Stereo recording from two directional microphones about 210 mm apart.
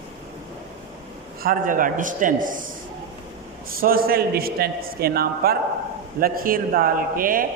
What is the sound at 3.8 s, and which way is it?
A man's voice, 45° right (ahead or behind).